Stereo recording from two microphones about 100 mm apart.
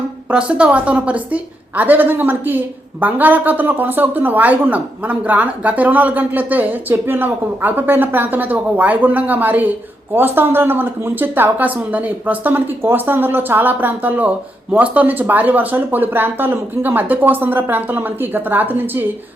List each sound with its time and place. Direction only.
0.3 s a woman's voice: 10° right (ahead or behind)